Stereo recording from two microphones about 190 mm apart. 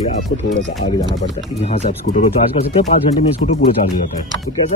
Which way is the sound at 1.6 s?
35° left (ahead or behind).